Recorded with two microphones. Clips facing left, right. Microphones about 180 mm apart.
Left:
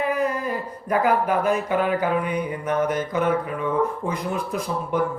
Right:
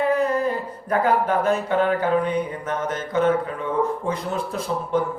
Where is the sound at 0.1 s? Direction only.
10° left (ahead or behind).